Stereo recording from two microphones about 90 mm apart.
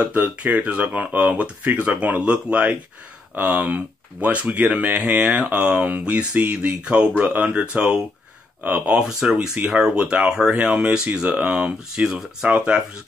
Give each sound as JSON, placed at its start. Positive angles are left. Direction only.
{"t": 0.1, "sound": "speech", "side_deg": -15}